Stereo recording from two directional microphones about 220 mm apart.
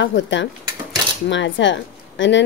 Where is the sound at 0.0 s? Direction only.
55° left (ahead or behind).